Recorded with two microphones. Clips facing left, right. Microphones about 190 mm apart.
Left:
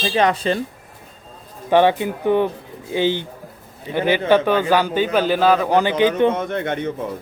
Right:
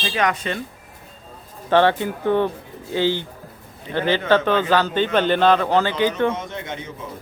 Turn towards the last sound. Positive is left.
turn(degrees=60)  # may be behind; listen again after turning